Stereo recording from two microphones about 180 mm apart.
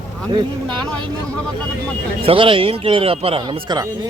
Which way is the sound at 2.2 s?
30° right (ahead or behind).